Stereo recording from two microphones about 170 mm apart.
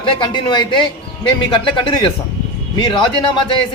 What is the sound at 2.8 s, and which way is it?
Speech, 25° left (ahead or behind).